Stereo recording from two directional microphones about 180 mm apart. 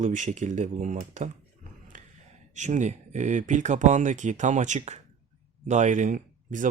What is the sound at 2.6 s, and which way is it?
Speech, 40° right (ahead or behind).